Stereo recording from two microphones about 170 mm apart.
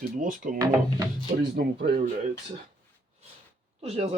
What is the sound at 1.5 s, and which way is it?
Speech, 65° right (ahead or behind).